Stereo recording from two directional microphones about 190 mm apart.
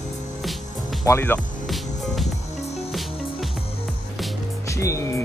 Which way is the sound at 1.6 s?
Centre (ahead or behind).